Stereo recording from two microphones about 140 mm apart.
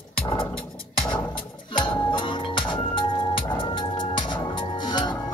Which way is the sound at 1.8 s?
35° left (ahead or behind).